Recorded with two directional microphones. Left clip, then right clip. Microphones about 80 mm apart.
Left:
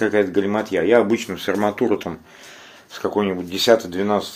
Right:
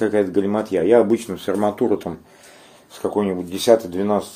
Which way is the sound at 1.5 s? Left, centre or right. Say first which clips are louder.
Even; right.